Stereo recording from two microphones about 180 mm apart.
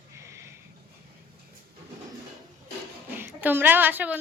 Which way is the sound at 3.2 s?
10° right (ahead or behind).